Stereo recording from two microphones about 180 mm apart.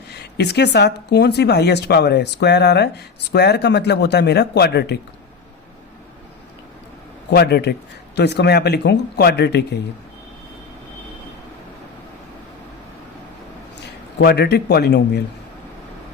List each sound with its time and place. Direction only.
0.1 s speech: 65° left (ahead or behind)
7.3 s speech: 65° left (ahead or behind)
14.2 s a man's voice: 65° left (ahead or behind)